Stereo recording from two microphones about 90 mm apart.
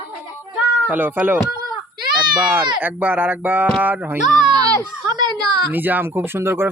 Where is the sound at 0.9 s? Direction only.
20° right (ahead or behind).